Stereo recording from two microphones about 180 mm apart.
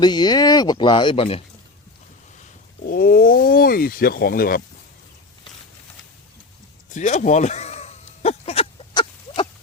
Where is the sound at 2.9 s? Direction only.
55° left (ahead or behind).